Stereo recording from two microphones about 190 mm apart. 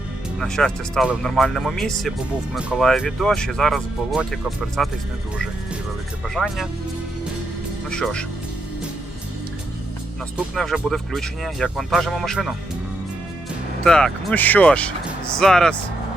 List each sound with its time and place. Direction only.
0.3 s speech: 5° left (ahead or behind)
6.2 s speech: centre (ahead or behind)
7.9 s speech: 5° left (ahead or behind)
10.3 s speech: centre (ahead or behind)
13.8 s speech: 5° left (ahead or behind)